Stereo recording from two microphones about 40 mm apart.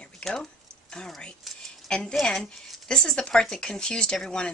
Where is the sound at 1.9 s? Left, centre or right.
Left.